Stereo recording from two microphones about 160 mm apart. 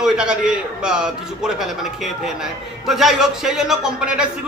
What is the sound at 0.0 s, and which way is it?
A man's voice, 5° right (ahead or behind).